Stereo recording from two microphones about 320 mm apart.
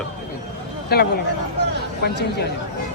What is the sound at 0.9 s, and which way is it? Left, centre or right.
Speech, left.